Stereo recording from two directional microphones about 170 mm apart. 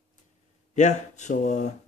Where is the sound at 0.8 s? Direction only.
45° left (ahead or behind).